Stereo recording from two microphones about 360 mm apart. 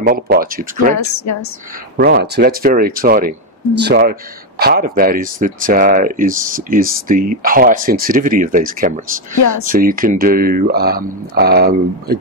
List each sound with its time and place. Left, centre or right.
0.0 s speech: right
0.9 s a woman's voice: left
2.0 s speech: right